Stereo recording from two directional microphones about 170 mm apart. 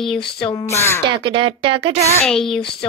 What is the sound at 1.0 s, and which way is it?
Speech, 30° right (ahead or behind).